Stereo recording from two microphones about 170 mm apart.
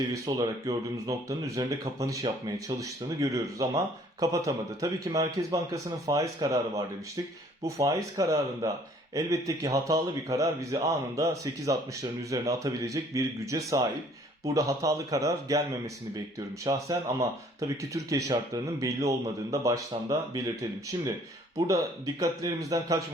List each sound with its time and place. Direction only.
0.1 s speech: 20° right (ahead or behind)
16.6 s speech: 20° right (ahead or behind)